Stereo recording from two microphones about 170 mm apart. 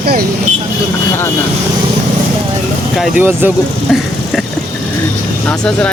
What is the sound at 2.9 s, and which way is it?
Speech, centre (ahead or behind).